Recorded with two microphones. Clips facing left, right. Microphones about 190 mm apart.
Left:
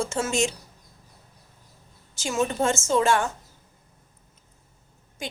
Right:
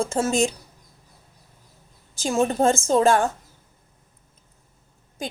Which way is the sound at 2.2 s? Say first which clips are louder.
Right 4 dB; 35° right (ahead or behind).